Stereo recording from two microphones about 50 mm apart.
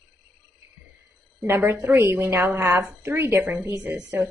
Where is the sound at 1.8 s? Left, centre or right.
Right.